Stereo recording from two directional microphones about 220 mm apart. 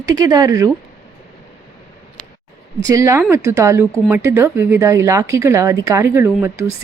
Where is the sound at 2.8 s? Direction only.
15° right (ahead or behind).